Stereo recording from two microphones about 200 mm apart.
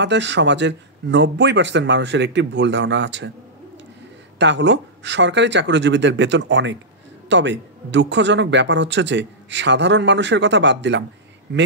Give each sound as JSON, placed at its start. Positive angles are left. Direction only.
{"t": 0.0, "sound": "speech", "side_deg": -60}
{"t": 4.4, "sound": "speech", "side_deg": -60}